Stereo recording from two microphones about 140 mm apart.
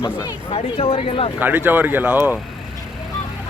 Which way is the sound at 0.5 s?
40° left (ahead or behind).